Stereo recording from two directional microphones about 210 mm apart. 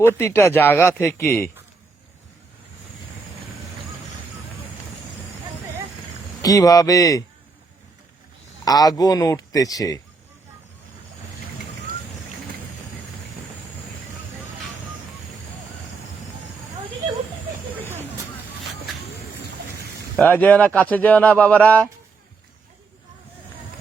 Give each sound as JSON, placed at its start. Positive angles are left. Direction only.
{"t": 0.2, "sound": "speech", "side_deg": 10}
{"t": 6.4, "sound": "speech", "side_deg": 15}
{"t": 8.6, "sound": "speech", "side_deg": 20}
{"t": 20.1, "sound": "speech", "side_deg": 10}